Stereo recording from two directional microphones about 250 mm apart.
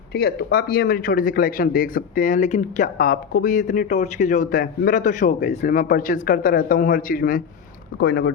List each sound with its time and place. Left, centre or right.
0.1 s speech: left